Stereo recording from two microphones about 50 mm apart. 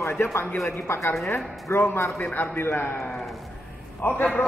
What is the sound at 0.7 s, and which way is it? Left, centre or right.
A woman's voice, left.